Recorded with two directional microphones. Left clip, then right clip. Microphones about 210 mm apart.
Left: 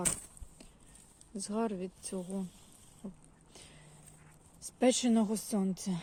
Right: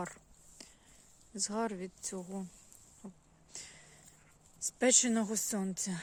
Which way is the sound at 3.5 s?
10° right (ahead or behind).